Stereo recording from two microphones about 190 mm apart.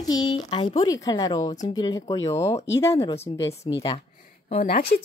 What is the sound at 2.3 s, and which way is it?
Speech, 35° left (ahead or behind).